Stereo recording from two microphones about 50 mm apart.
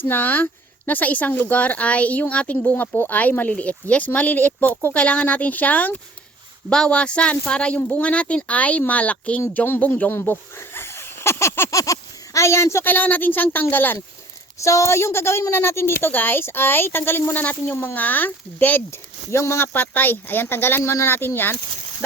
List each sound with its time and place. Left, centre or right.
0.0 s a woman's voice: left
6.7 s speech: centre
9.6 s a woman's voice: left
10.6 s a sound: left
11.7 s speech: left
12.8 s a woman's voice: left
14.6 s a woman's voice: left
17.3 s a woman's voice: left
19.3 s speech: left
19.7 s a woman's voice: left